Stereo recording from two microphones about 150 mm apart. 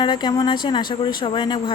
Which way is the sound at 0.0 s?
30° left (ahead or behind).